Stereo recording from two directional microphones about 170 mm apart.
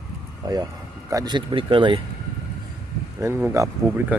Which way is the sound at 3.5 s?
15° right (ahead or behind).